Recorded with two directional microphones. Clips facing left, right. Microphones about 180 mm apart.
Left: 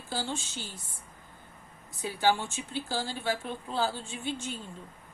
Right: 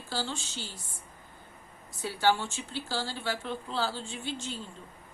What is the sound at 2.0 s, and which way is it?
Speech, 15° left (ahead or behind).